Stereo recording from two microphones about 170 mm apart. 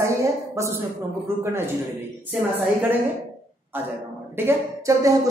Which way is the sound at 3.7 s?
10° right (ahead or behind).